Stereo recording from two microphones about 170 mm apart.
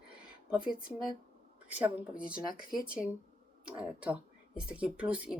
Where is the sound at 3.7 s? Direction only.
5° right (ahead or behind).